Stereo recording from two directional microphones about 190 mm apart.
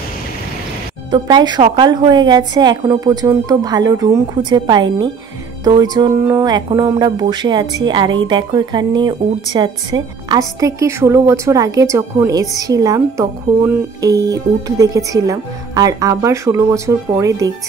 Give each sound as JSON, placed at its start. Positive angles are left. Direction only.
{"t": 1.1, "sound": "a woman's voice", "side_deg": -20}